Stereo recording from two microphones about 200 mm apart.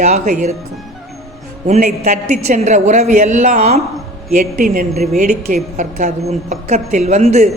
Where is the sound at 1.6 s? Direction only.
35° right (ahead or behind).